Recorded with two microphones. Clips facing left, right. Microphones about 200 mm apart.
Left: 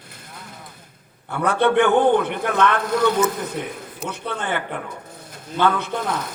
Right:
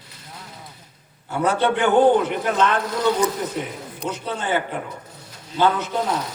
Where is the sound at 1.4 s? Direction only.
60° left (ahead or behind).